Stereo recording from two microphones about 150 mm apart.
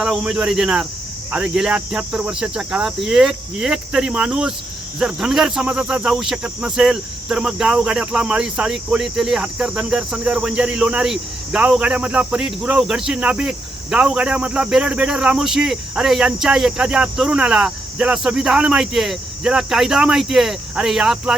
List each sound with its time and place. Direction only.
0.0 s speech: 5° right (ahead or behind)